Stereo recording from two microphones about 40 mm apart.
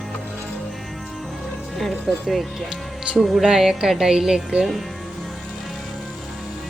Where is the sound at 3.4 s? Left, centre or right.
Centre.